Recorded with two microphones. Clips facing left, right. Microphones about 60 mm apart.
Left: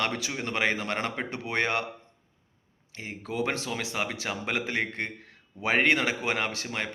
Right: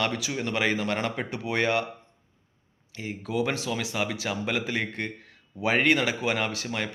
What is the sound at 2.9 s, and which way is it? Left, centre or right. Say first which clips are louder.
A man's voice: right 3 dB; left.